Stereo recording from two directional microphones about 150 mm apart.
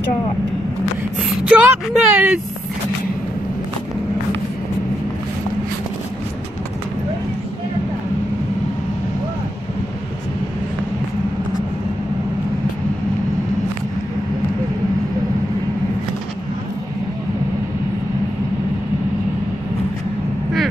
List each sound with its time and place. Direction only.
1.5 s speech: 10° right (ahead or behind)